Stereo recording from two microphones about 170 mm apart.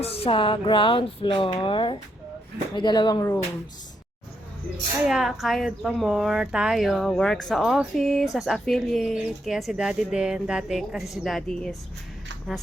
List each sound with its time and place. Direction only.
0.0 s speech: 35° left (ahead or behind); by 3.4 s 20° left (ahead or behind)
5.0 s speech: centre (ahead or behind)